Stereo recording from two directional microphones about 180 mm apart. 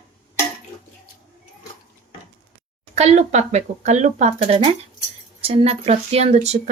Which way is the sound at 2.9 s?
40° right (ahead or behind).